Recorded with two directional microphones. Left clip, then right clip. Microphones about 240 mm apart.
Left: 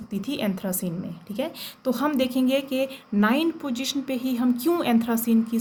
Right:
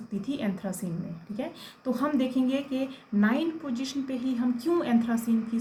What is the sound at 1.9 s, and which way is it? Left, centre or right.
A woman's voice, left.